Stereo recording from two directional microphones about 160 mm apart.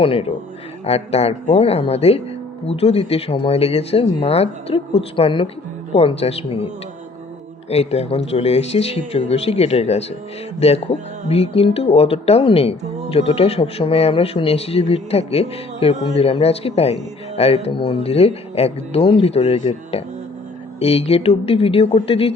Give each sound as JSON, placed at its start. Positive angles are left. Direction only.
{"t": 0.0, "sound": "speech", "side_deg": 35}
{"t": 7.7, "sound": "speech", "side_deg": 40}